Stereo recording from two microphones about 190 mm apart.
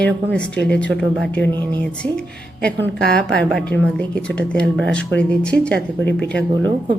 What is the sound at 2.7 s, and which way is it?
A woman's voice, 5° left (ahead or behind).